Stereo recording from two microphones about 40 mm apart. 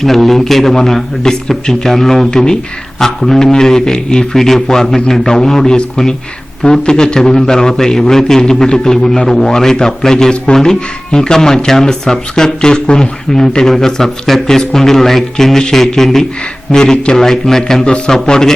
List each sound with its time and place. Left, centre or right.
0.0 s a man's voice: centre